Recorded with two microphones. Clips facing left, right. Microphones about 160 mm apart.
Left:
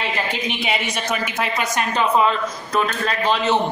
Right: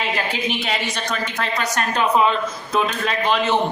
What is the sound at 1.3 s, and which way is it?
Speech, 20° left (ahead or behind).